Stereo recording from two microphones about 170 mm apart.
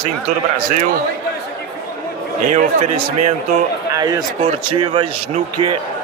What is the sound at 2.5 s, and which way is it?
Speech, 40° right (ahead or behind).